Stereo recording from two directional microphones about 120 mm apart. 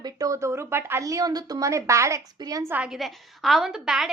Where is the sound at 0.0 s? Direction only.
30° right (ahead or behind).